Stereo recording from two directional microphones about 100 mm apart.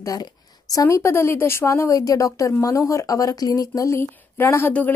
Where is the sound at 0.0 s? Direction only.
35° left (ahead or behind).